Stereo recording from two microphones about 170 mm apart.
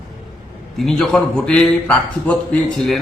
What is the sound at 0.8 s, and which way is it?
A man's voice, 5° left (ahead or behind).